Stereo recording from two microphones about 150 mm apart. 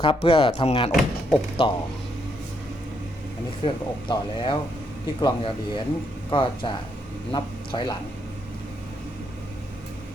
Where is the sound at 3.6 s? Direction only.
35° left (ahead or behind).